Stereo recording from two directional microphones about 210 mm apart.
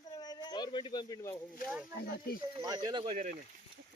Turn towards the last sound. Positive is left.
turn(degrees=-30)  # may be behind; listen again after turning